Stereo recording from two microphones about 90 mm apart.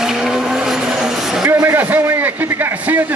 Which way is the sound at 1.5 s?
25° right (ahead or behind).